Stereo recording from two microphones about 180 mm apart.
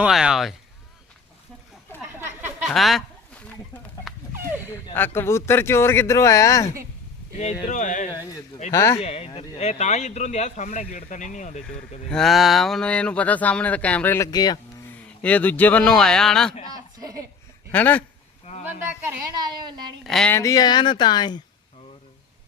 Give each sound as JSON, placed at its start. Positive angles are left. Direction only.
{"t": 0.0, "sound": "speech", "side_deg": -5}
{"t": 2.0, "sound": "a sound", "side_deg": -10}
{"t": 2.6, "sound": "speech", "side_deg": 0}
{"t": 4.9, "sound": "speech", "side_deg": 10}
{"t": 7.7, "sound": "speech", "side_deg": 45}
{"t": 8.1, "sound": "speech", "side_deg": 20}
{"t": 9.0, "sound": "speech", "side_deg": 35}
{"t": 11.6, "sound": "speech", "side_deg": 5}
{"t": 14.8, "sound": "speech", "side_deg": 10}
{"t": 16.7, "sound": "a sound", "side_deg": -20}
{"t": 17.7, "sound": "speech", "side_deg": 10}
{"t": 19.3, "sound": "a woman's voice", "side_deg": -25}
{"t": 20.1, "sound": "speech", "side_deg": 0}
{"t": 20.3, "sound": "speech", "side_deg": 20}